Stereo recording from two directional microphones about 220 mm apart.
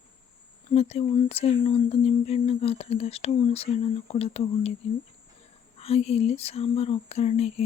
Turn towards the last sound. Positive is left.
turn(degrees=30)  # may be behind; listen again after turning